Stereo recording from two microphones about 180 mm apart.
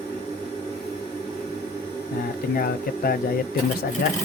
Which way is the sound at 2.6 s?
55° left (ahead or behind).